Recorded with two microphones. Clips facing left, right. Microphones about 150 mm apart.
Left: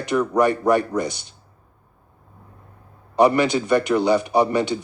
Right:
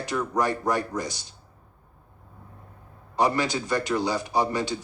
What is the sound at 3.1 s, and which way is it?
Speech, 60° left (ahead or behind).